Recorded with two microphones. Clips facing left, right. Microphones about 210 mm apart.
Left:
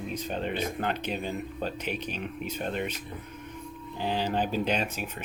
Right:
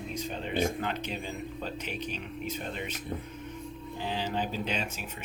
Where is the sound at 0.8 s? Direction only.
55° left (ahead or behind).